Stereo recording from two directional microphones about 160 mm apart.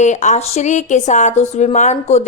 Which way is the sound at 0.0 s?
50° left (ahead or behind).